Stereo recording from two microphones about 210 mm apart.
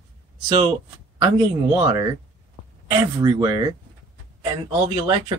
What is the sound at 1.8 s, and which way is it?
Speech, 20° right (ahead or behind).